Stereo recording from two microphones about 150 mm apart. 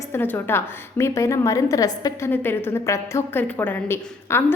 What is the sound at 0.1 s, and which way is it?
A woman's voice, 15° left (ahead or behind).